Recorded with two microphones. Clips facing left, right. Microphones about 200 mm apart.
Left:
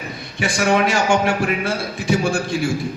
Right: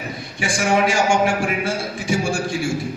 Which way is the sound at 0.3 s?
60° left (ahead or behind).